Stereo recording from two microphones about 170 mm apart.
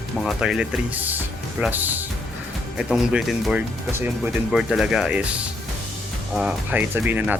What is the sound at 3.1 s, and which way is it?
Speech, 5° right (ahead or behind).